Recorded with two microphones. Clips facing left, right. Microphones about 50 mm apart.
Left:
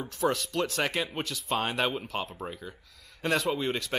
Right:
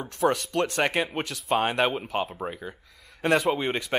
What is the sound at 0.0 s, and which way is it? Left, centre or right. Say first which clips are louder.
Speech: right 4 dB; centre.